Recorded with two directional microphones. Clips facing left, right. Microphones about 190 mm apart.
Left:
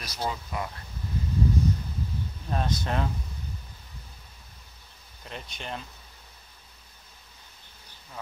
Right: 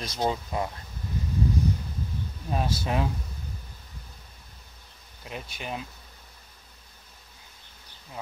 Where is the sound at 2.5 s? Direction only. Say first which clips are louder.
Right 1 dB; 5° right (ahead or behind).